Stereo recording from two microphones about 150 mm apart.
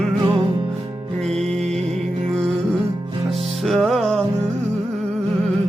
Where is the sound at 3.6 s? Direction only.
Centre (ahead or behind).